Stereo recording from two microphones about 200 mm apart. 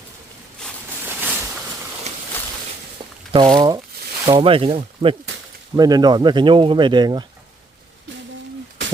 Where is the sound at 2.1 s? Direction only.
35° right (ahead or behind).